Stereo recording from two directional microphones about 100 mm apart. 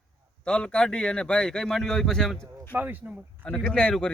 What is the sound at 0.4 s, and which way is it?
Speech, 10° left (ahead or behind).